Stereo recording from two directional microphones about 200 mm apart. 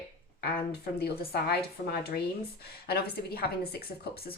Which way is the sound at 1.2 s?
55° left (ahead or behind).